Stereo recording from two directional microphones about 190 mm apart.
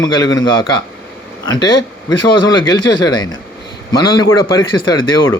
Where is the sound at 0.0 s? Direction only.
20° left (ahead or behind).